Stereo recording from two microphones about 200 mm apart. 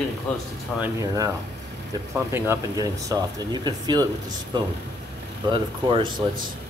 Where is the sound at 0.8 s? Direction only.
15° right (ahead or behind).